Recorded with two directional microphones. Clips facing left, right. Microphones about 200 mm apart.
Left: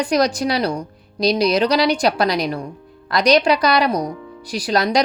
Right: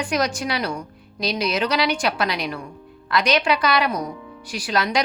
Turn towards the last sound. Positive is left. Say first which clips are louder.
# left 5 dB
turn(degrees=40)  # may be behind; listen again after turning